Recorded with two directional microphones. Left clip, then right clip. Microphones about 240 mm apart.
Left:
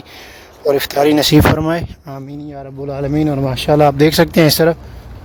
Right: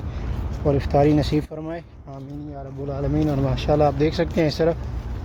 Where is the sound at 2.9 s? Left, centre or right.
Left.